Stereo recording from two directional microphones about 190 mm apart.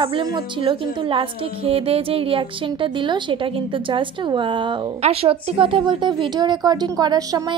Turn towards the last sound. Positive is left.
turn(degrees=-20)  # may be behind; listen again after turning